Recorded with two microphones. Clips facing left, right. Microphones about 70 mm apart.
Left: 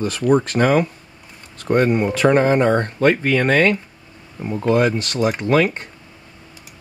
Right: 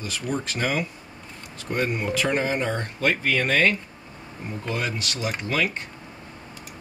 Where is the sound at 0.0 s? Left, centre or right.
Left.